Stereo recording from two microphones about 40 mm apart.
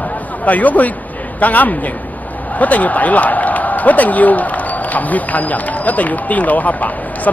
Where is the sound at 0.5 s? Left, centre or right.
Left.